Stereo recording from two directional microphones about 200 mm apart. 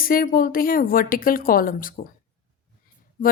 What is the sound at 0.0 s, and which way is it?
Speech, 45° left (ahead or behind).